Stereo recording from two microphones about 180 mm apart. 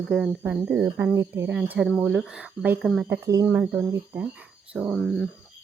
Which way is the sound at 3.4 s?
10° right (ahead or behind).